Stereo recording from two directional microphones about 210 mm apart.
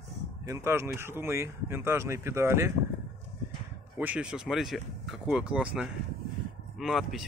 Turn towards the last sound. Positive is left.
turn(degrees=0)  # may be behind; listen again after turning